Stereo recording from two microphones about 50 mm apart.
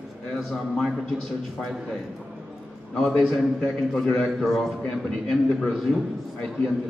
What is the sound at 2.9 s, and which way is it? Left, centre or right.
A man's voice, centre.